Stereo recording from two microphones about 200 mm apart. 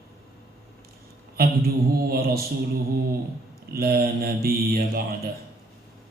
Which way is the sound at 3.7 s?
50° right (ahead or behind).